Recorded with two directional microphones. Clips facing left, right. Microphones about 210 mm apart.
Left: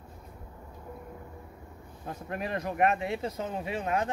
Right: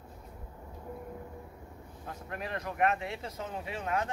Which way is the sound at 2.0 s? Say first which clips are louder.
Left 5 dB; 20° left (ahead or behind).